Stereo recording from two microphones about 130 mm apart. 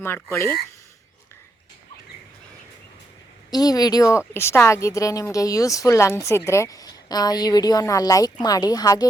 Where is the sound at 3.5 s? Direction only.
30° left (ahead or behind).